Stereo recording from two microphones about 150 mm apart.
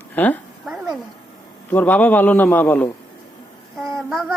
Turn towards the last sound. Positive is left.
turn(degrees=0)  # may be behind; listen again after turning